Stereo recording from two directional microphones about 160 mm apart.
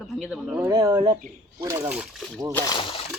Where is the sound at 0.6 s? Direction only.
20° right (ahead or behind).